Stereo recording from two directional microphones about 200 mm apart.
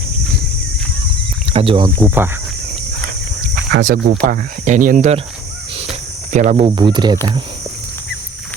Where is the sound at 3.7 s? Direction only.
50° right (ahead or behind).